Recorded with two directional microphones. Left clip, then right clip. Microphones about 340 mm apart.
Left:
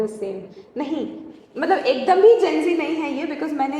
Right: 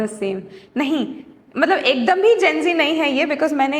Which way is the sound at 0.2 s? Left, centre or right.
Right.